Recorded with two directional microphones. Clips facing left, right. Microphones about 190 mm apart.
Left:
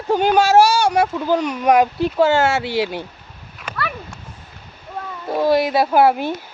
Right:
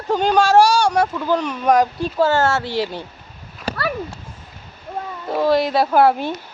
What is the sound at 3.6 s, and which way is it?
Horse, 35° right (ahead or behind).